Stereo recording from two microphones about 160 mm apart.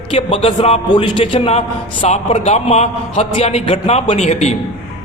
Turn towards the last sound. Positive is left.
turn(degrees=45)  # may be behind; listen again after turning